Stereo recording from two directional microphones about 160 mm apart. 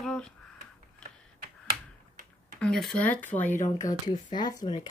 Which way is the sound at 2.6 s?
5° left (ahead or behind).